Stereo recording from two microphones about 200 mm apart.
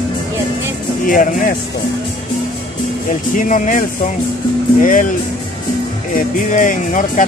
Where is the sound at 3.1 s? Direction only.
40° left (ahead or behind).